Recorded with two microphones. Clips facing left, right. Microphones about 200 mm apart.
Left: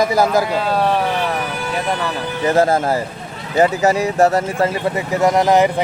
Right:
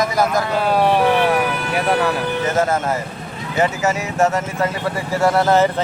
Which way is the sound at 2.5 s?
35° left (ahead or behind).